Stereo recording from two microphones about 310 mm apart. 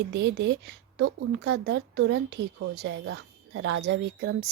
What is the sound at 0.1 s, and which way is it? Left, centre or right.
Speech, right.